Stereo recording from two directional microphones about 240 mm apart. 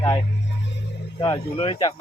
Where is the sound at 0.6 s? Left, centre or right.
Left.